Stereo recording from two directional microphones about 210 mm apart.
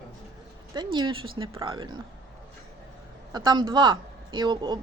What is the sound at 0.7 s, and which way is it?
Speech, 20° right (ahead or behind).